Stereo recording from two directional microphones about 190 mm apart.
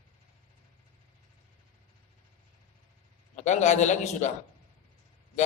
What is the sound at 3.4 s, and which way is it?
Speech, 40° left (ahead or behind).